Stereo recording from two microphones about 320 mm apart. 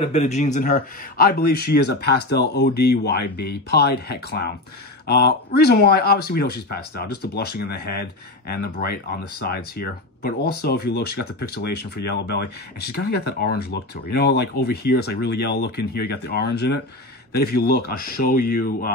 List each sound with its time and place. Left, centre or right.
0.0 s speech: left